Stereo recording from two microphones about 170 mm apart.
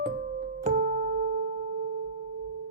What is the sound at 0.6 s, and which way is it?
Music, 50° right (ahead or behind).